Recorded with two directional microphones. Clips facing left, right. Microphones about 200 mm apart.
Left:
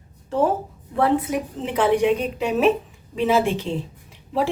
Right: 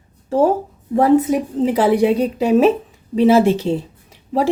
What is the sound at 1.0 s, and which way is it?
A woman's voice, 40° right (ahead or behind).